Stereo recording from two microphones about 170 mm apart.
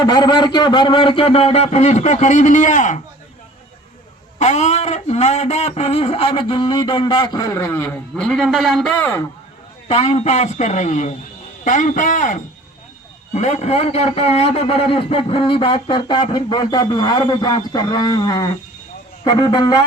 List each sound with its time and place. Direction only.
0.0 s a man's voice: 25° left (ahead or behind); by 3.0 s 50° left (ahead or behind)
4.4 s a man's voice: 45° left (ahead or behind); by 9.0 s centre (ahead or behind)
9.9 s a man's voice: 40° left (ahead or behind)